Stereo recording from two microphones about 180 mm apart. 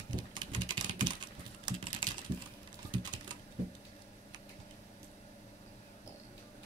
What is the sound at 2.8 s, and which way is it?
Typing, 25° right (ahead or behind).